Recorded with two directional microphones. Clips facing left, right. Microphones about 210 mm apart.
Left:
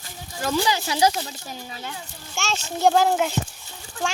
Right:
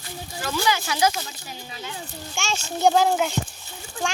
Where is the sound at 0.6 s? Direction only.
30° left (ahead or behind).